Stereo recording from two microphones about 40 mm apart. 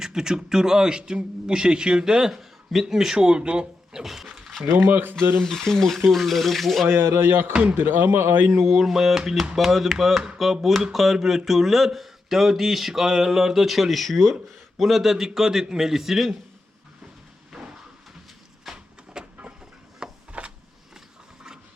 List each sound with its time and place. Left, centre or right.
0.0 s a man's voice: centre
3.9 s a man's voice: centre
4.8 s speech: right
5.4 s speech: centre
6.8 s speech: right
7.8 s speech: right
8.1 s a man's voice: right
8.4 s speech: right
8.8 s a man's voice: centre
18.7 s a sound: centre
19.2 s vehicle: right
20.0 s a sound: centre